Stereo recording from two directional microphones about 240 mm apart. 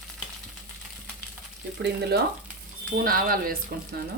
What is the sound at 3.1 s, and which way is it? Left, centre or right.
Speech, right.